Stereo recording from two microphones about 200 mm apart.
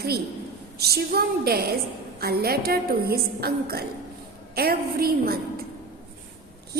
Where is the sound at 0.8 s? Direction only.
50° right (ahead or behind).